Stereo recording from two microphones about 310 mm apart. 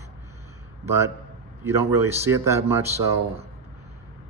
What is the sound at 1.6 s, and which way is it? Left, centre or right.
A man's voice, centre.